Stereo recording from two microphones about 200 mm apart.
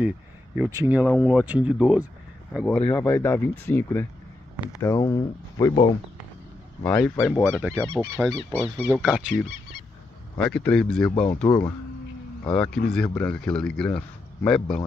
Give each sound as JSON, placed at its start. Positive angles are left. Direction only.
{"t": 0.6, "sound": "speech", "side_deg": -10}
{"t": 2.5, "sound": "speech", "side_deg": 5}
{"t": 6.8, "sound": "speech", "side_deg": 5}
{"t": 8.8, "sound": "speech", "side_deg": -10}
{"t": 10.3, "sound": "speech", "side_deg": 5}